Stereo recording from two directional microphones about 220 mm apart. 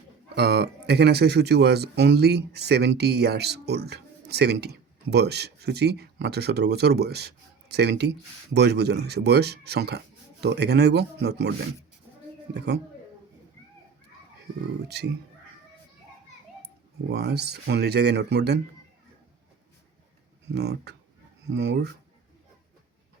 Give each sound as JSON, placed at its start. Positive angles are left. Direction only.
{"t": 0.3, "sound": "speech", "side_deg": -50}
{"t": 12.5, "sound": "speech", "side_deg": -50}
{"t": 14.8, "sound": "speech", "side_deg": -50}
{"t": 17.1, "sound": "speech", "side_deg": -50}
{"t": 20.5, "sound": "speech", "side_deg": -50}